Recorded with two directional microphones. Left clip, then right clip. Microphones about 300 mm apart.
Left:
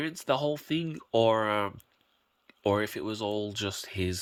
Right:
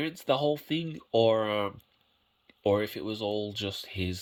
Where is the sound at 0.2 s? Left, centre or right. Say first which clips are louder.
Right 2 dB; centre.